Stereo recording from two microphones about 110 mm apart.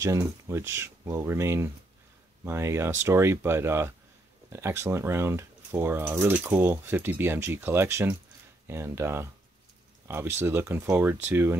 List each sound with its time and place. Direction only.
0.0 s speech: 25° right (ahead or behind)